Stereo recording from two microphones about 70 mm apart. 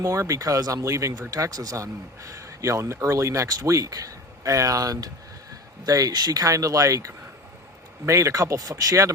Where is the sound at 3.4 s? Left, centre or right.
Right.